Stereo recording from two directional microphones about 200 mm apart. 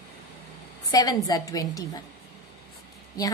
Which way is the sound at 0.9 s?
20° left (ahead or behind).